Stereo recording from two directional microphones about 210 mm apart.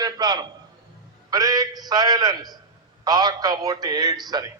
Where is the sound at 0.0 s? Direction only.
20° right (ahead or behind).